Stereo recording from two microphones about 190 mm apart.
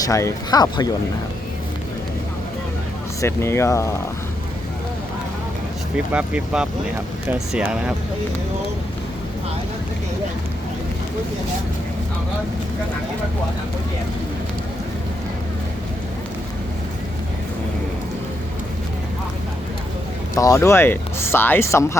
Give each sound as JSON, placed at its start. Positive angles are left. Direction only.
{"t": 0.0, "sound": "speech", "side_deg": 15}
{"t": 3.2, "sound": "speech", "side_deg": 15}
{"t": 6.1, "sound": "speech", "side_deg": -5}
{"t": 20.3, "sound": "speech", "side_deg": 15}